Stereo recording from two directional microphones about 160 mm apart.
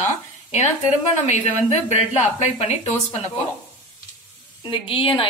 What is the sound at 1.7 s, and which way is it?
Speech, 45° left (ahead or behind).